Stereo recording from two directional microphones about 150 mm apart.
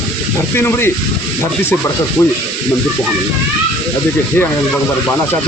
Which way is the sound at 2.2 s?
15° left (ahead or behind).